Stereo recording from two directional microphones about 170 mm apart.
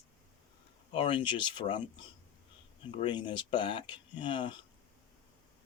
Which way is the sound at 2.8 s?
30° left (ahead or behind).